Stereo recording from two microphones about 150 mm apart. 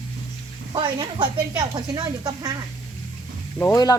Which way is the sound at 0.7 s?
30° right (ahead or behind).